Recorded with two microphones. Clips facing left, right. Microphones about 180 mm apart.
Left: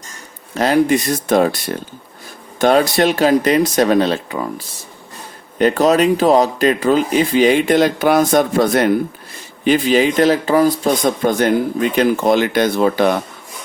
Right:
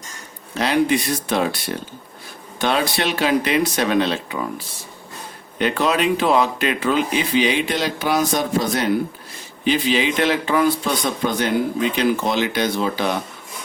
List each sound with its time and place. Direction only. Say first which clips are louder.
0.5 s speech: left 4 dB; 45° left (ahead or behind)
2.6 s speech: left 8 dB; 45° left (ahead or behind)
5.5 s speech: left 7 dB; 40° left (ahead or behind)